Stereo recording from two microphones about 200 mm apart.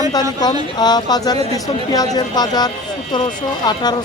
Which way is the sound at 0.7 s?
20° left (ahead or behind).